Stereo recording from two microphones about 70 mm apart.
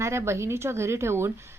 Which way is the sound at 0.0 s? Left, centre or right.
Right.